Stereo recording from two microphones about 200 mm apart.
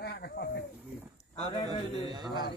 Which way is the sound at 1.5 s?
20° left (ahead or behind).